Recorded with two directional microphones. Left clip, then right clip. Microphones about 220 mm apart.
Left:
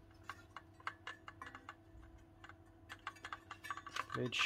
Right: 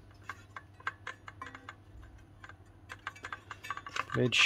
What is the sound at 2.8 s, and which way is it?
Typing, 20° right (ahead or behind).